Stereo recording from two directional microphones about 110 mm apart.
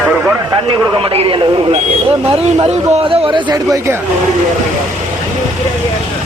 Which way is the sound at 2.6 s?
60° right (ahead or behind).